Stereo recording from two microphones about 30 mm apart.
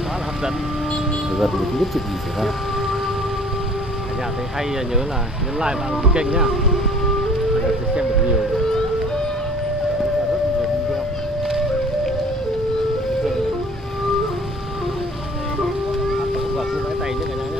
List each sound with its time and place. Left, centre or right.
1.3 s speech: centre
5.6 s speech: right
16.1 s boat: centre